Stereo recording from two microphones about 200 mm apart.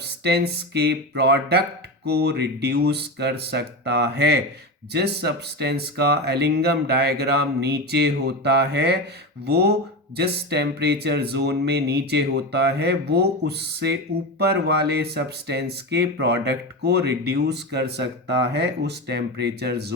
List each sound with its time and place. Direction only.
0.0 s speech: 55° right (ahead or behind)